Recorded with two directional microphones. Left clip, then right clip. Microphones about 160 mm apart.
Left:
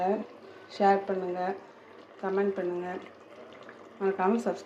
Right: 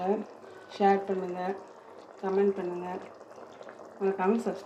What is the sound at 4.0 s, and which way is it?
Speech, 10° left (ahead or behind).